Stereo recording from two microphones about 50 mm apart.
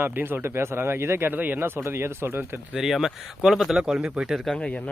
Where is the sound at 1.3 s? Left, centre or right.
Right.